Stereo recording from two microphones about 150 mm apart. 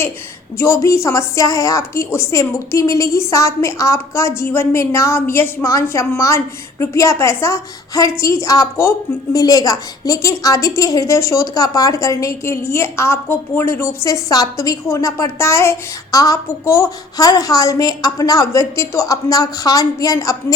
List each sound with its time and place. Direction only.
0.5 s a woman's voice: 20° left (ahead or behind)